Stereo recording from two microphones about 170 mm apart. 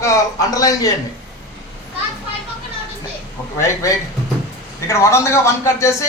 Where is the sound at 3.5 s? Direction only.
20° left (ahead or behind).